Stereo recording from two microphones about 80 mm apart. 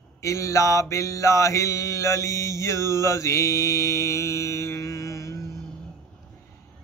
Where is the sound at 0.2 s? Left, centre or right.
Left.